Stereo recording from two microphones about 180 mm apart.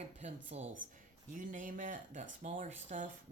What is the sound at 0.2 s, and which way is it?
Speech, 40° right (ahead or behind).